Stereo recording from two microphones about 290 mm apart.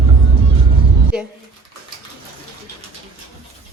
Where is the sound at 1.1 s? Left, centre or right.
Centre.